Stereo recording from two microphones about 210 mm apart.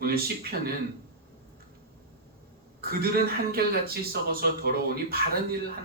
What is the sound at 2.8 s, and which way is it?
Speech, 45° right (ahead or behind).